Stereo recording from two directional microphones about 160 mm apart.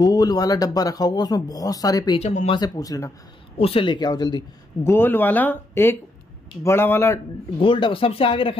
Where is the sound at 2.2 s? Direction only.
40° left (ahead or behind).